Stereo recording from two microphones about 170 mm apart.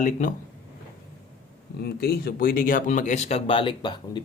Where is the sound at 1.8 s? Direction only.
70° left (ahead or behind).